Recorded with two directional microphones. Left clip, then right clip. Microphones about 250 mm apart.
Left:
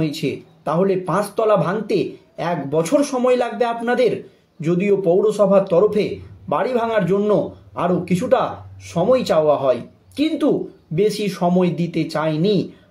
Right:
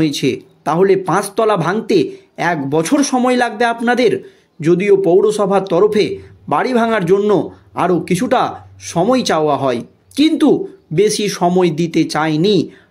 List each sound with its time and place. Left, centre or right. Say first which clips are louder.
0.0 s speech: right 7 dB; right